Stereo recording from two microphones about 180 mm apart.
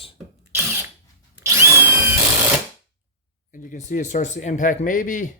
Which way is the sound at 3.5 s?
45° left (ahead or behind).